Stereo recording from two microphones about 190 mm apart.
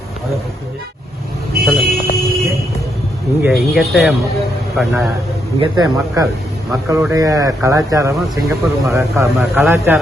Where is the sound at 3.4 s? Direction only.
5° right (ahead or behind).